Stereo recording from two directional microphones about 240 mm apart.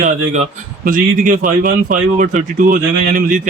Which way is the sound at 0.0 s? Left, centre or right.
Right.